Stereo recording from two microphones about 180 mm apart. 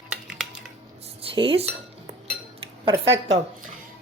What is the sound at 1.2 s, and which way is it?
Cutlery, 30° right (ahead or behind).